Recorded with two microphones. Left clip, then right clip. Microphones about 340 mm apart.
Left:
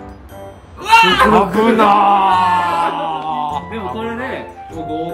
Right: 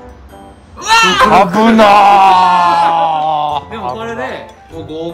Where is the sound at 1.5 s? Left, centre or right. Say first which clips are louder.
Right 5 dB; right.